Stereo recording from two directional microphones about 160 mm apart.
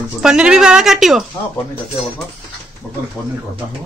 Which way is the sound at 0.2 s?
5° right (ahead or behind).